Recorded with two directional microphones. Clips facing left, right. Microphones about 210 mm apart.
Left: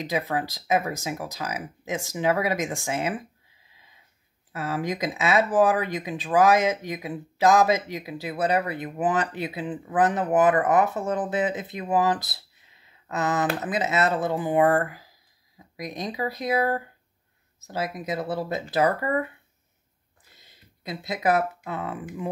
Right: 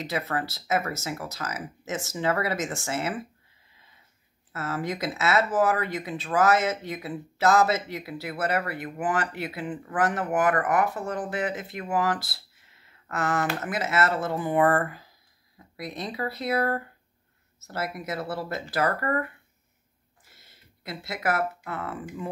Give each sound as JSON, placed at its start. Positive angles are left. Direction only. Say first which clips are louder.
{"t": 0.0, "sound": "speech", "louder": "left 3 dB", "side_deg": 15}
{"t": 4.5, "sound": "speech", "louder": "left 2 dB", "side_deg": 15}
{"t": 20.2, "sound": "a sound", "louder": "left 1 dB", "side_deg": 20}